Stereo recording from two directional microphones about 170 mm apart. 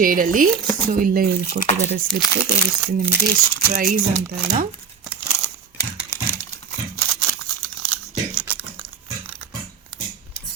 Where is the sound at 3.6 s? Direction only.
55° right (ahead or behind).